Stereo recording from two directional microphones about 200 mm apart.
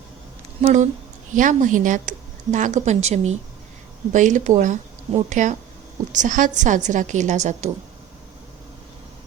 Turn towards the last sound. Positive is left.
turn(degrees=-35)  # may be behind; listen again after turning